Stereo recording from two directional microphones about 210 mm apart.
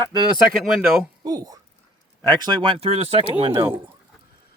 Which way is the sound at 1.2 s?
20° right (ahead or behind).